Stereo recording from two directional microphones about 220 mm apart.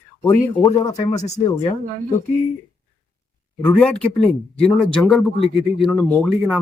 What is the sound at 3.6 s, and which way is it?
Speech, 5° left (ahead or behind).